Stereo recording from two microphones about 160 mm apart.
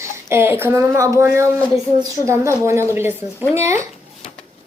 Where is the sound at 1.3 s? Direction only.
15° right (ahead or behind).